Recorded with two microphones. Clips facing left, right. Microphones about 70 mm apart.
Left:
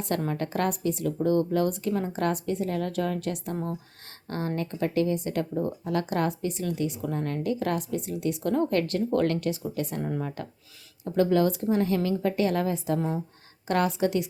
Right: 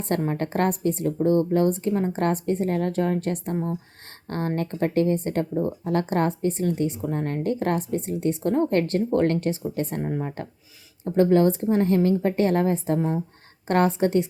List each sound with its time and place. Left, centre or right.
0.3 s a woman's voice: right